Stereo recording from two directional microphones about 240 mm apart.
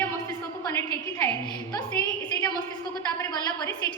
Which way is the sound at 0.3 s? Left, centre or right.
Centre.